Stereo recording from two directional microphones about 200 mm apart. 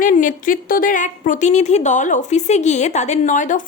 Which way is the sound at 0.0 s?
40° left (ahead or behind).